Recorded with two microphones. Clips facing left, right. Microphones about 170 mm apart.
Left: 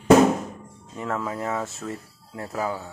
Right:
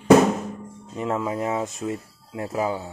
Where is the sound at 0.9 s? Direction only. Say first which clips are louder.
Right 3 dB; 20° right (ahead or behind).